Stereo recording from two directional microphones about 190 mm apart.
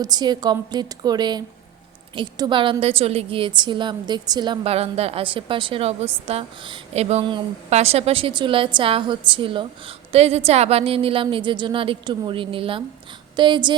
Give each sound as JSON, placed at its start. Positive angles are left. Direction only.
{"t": 0.0, "sound": "a woman's voice", "side_deg": -20}